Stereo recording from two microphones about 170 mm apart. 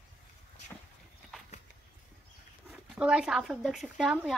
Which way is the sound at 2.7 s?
5° right (ahead or behind).